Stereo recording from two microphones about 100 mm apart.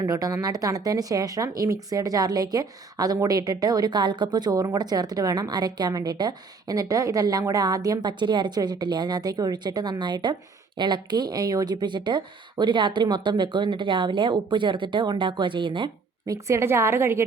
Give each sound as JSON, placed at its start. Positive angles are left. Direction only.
{"t": 0.0, "sound": "a woman's voice", "side_deg": -35}
{"t": 16.2, "sound": "a woman's voice", "side_deg": -30}